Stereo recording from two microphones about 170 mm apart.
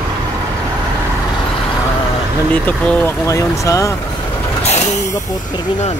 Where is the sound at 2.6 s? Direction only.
15° left (ahead or behind).